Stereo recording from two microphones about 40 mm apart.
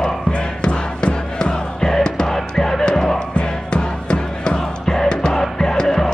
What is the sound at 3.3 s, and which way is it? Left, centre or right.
Music, left.